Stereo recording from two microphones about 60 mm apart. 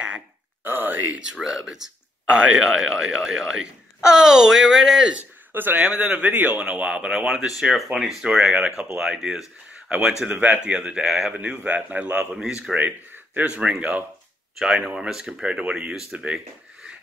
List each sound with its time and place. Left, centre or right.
0.7 s a sound: right
1.3 s speech: centre
5.5 s speech: right
5.8 s speech: right
6.6 s speech: right
10.3 s speech: right
11.3 s speech: right
12.7 s speech: right
14.6 s speech: centre